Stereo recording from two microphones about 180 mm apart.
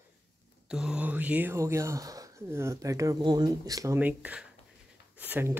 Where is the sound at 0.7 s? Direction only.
5° right (ahead or behind).